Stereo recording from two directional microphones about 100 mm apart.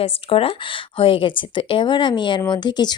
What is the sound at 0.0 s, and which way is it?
Speech, 70° left (ahead or behind).